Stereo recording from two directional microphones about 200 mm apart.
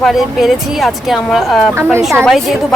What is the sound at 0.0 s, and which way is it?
A woman's voice, centre (ahead or behind).